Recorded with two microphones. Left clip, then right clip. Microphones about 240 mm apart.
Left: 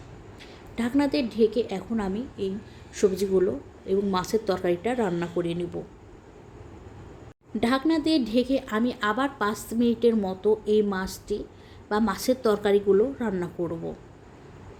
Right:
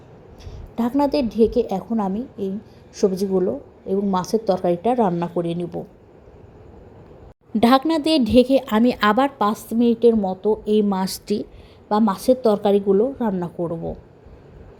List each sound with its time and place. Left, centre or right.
0.8 s a woman's voice: centre
7.6 s a woman's voice: right; by 10.9 s centre
10.9 s speech: right
11.9 s a woman's voice: centre
13.0 s speech: centre
13.3 s a woman's voice: centre